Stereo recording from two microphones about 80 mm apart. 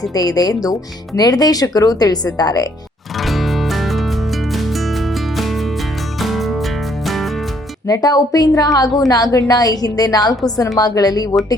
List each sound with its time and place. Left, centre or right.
0.1 s a woman's voice: left
3.2 s music: centre
7.9 s a woman's voice: left